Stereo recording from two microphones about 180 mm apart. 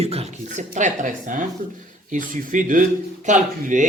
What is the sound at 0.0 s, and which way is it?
Speech, 35° right (ahead or behind).